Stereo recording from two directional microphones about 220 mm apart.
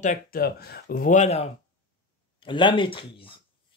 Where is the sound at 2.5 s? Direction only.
20° left (ahead or behind).